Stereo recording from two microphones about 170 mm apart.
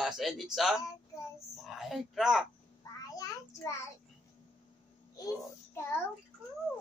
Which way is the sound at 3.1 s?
20° left (ahead or behind).